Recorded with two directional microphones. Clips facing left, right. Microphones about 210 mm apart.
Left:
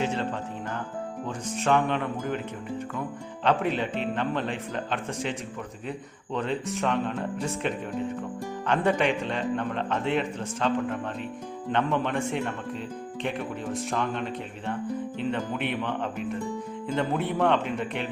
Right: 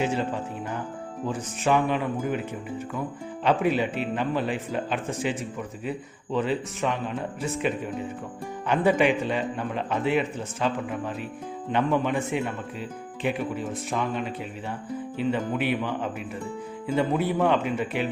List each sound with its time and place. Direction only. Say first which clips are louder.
0.0 s speech: right 2 dB; 10° right (ahead or behind)
1.3 s speech: right 1 dB; 5° right (ahead or behind)
3.4 s speech: right 2 dB; 10° right (ahead or behind)